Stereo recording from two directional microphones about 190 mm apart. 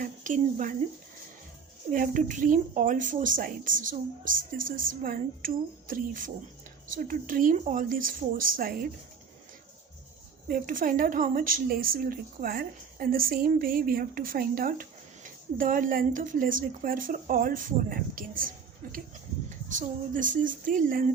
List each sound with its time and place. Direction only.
0.0 s speech: 40° right (ahead or behind)
1.9 s a woman's voice: 45° right (ahead or behind)
10.5 s a woman's voice: 45° right (ahead or behind)